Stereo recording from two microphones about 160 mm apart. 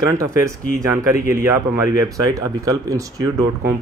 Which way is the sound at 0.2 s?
20° right (ahead or behind).